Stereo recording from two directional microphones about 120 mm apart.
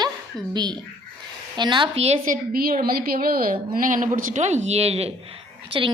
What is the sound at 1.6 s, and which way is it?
Speech, 40° right (ahead or behind).